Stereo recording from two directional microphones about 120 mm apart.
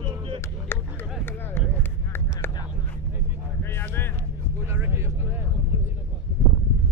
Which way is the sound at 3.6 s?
20° left (ahead or behind).